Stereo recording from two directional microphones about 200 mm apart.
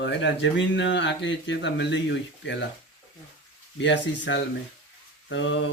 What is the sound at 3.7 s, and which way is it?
Speech, 65° left (ahead or behind).